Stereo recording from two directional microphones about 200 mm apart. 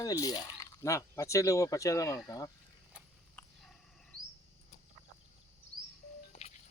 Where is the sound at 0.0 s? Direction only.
20° left (ahead or behind).